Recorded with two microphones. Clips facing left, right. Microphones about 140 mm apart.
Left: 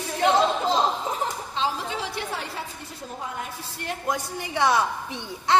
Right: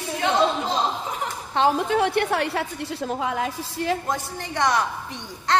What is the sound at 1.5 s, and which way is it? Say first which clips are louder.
A woman's voice: right 10 dB; 55° right (ahead or behind).